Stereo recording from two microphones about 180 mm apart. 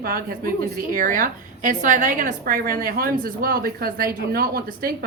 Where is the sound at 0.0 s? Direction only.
55° right (ahead or behind).